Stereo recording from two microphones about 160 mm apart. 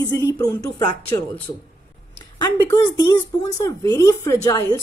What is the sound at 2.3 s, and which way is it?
Speech, 20° left (ahead or behind).